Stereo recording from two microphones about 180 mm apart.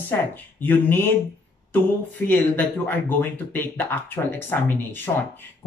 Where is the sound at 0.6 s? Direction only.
10° left (ahead or behind).